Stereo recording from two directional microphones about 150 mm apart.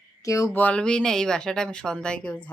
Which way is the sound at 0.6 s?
5° left (ahead or behind).